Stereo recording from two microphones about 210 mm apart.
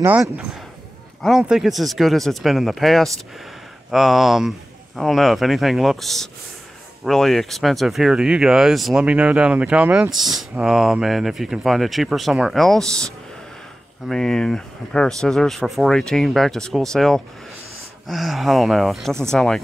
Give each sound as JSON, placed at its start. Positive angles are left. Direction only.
{"t": 0.0, "sound": "speech", "side_deg": -5}